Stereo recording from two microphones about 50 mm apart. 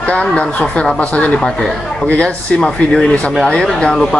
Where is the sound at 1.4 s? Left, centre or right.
Centre.